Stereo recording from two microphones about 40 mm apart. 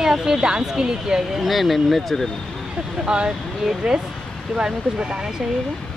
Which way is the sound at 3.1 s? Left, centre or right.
Right.